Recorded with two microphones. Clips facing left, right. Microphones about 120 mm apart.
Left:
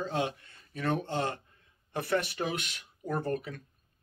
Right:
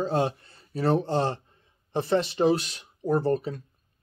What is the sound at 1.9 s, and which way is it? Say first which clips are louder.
Speech: right 6 dB; 25° right (ahead or behind).